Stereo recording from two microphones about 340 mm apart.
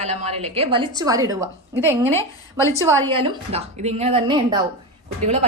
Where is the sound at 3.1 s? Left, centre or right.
Centre.